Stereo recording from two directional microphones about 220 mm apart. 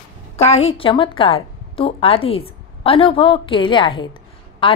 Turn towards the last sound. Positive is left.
turn(degrees=25)  # may be behind; listen again after turning